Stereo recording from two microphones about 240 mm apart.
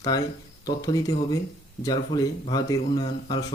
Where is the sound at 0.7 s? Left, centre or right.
Centre.